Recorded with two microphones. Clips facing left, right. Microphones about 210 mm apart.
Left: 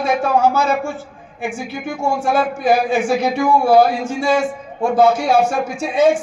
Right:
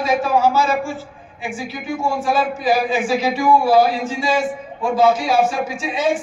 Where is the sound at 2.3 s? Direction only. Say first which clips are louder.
Left 2 dB; 55° left (ahead or behind).